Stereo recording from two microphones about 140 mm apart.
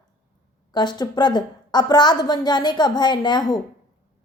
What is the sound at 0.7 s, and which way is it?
A woman's voice, 30° left (ahead or behind).